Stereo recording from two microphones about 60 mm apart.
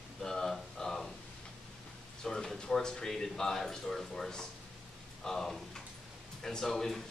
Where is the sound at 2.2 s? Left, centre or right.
Centre.